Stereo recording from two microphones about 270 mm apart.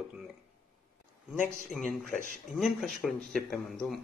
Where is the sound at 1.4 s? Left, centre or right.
Centre.